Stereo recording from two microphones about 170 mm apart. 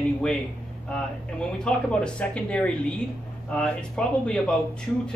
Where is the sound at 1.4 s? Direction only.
5° left (ahead or behind).